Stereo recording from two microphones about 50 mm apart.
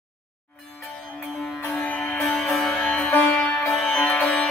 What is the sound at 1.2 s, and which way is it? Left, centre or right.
Music, centre.